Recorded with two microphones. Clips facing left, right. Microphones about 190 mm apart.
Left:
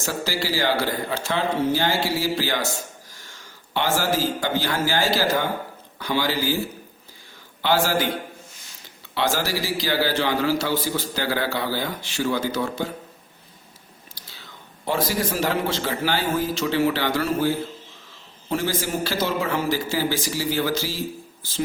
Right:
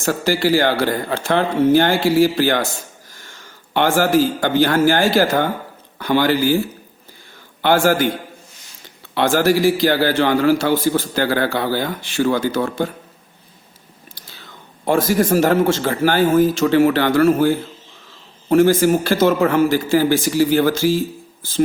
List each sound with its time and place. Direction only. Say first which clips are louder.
0.0 s speech: right 9 dB; 55° right (ahead or behind)
3.8 s speech: right 8 dB; 55° right (ahead or behind)
7.6 s a man's voice: right 7 dB; 50° right (ahead or behind)
9.1 s a man's voice: right 9 dB; 50° right (ahead or behind)
14.8 s a man's voice: right 8 dB; 50° right (ahead or behind)